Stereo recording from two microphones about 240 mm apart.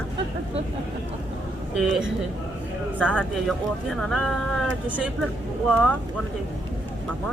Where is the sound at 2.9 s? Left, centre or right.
Centre.